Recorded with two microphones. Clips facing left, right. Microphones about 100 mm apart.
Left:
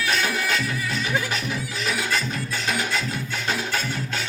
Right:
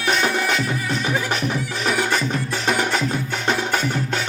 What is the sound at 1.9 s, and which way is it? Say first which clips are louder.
Music: right 5 dB; 55° right (ahead or behind).